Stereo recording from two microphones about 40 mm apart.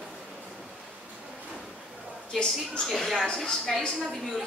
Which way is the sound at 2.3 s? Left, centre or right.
Centre.